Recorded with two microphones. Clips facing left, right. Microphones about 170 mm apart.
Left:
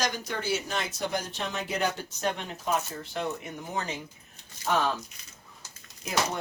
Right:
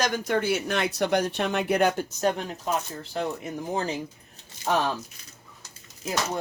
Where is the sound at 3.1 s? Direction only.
35° right (ahead or behind).